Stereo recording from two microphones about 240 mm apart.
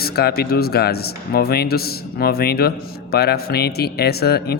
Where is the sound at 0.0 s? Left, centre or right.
Left.